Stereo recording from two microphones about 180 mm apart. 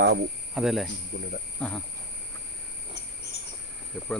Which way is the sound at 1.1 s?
70° left (ahead or behind).